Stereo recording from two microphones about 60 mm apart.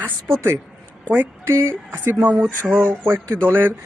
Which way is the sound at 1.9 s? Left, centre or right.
Right.